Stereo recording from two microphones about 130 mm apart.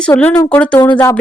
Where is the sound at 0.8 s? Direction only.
35° left (ahead or behind).